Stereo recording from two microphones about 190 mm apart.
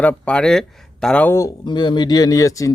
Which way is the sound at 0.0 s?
5° left (ahead or behind).